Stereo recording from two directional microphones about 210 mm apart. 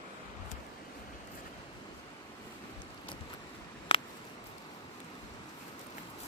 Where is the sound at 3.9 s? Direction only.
30° left (ahead or behind).